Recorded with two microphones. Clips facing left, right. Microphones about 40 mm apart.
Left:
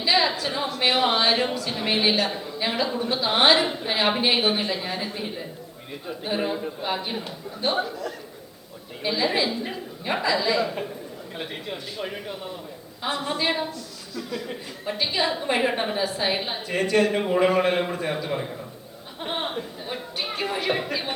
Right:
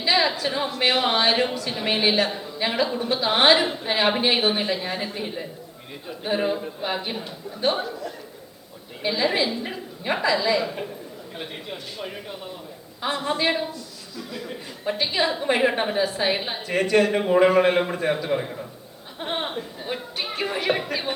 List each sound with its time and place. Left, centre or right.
0.0 s a sound: centre
0.9 s a woman's voice: centre
6.3 s a woman's voice: centre
9.0 s a woman's voice: centre
13.1 s a woman's voice: right
14.2 s a woman's voice: centre
14.8 s speech: centre
15.2 s a woman's voice: centre
16.9 s a woman's voice: centre